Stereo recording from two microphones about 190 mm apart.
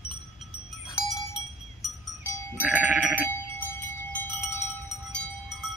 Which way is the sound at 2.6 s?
5° right (ahead or behind).